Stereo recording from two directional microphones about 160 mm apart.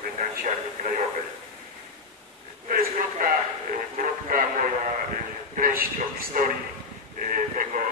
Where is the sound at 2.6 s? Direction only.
60° right (ahead or behind).